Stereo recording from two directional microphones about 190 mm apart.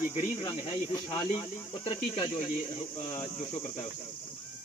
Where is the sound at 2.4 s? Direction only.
40° left (ahead or behind).